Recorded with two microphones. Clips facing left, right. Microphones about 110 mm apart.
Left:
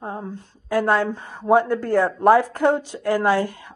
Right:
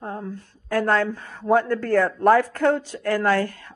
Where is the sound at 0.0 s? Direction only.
20° left (ahead or behind).